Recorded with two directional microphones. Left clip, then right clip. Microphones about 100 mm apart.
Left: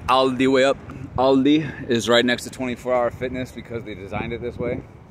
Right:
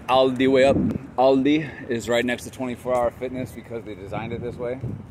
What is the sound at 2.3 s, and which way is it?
Speech, 30° left (ahead or behind).